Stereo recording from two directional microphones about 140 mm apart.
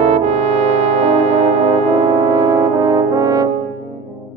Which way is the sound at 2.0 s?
25° right (ahead or behind).